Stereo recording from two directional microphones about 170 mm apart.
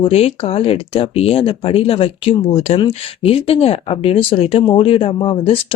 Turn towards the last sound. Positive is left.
turn(degrees=30)  # may be behind; listen again after turning